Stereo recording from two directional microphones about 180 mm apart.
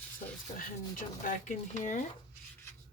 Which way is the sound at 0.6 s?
50° left (ahead or behind).